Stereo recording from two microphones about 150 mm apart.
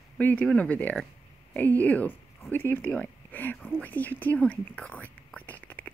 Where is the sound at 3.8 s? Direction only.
10° left (ahead or behind).